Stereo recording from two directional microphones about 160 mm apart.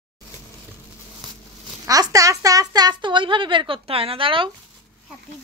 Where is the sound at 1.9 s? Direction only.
20° right (ahead or behind).